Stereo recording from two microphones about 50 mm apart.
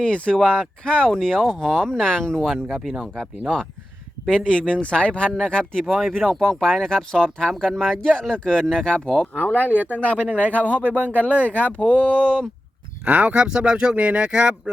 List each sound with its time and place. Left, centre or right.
0.0 s speech: centre
4.3 s speech: centre
5.8 s speech: centre; by 9.4 s left
9.5 s speech: left
9.7 s speech: right
10.0 s speech: left
10.8 s speech: right
11.1 s speech: left
13.1 s speech: right